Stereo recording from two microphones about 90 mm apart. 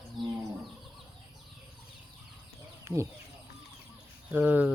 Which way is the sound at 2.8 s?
35° right (ahead or behind).